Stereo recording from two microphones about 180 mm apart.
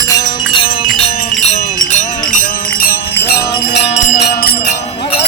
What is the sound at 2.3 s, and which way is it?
Music, 50° left (ahead or behind).